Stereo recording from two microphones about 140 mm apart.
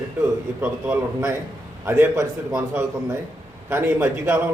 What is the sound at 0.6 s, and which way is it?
A man's voice, 10° right (ahead or behind).